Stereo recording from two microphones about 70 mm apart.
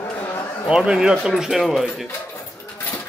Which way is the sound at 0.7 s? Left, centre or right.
Centre.